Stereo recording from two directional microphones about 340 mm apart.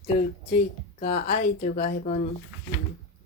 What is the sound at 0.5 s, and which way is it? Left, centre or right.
Speech, centre.